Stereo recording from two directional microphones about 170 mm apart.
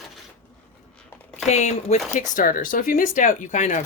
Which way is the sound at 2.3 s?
55° left (ahead or behind).